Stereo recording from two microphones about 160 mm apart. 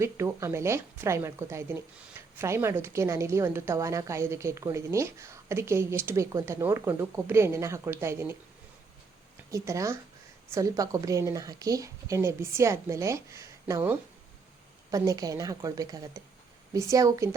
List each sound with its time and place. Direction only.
0.0 s speech: 15° right (ahead or behind)
9.5 s a woman's voice: 20° right (ahead or behind)